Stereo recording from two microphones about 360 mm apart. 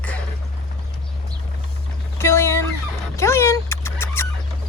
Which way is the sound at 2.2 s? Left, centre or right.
Centre.